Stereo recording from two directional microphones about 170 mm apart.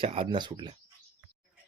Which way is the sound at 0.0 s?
30° right (ahead or behind).